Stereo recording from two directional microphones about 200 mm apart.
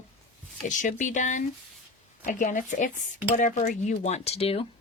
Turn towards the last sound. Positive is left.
turn(degrees=30)  # may be behind; listen again after turning